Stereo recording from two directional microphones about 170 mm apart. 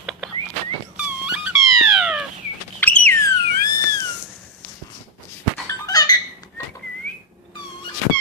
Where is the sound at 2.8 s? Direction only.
10° left (ahead or behind).